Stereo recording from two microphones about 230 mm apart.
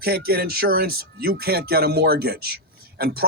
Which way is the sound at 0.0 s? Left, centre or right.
Right.